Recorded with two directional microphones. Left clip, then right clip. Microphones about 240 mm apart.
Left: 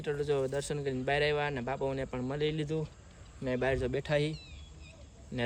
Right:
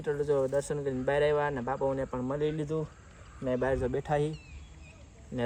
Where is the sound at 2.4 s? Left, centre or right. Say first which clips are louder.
Even; centre.